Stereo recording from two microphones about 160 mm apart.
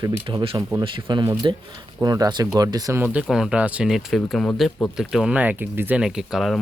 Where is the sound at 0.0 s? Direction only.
30° right (ahead or behind).